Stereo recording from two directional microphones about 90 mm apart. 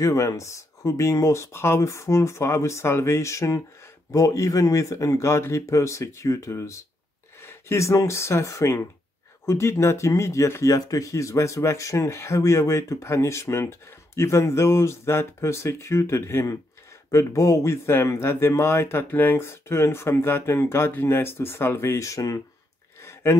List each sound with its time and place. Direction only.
0.0 s speech: 35° left (ahead or behind)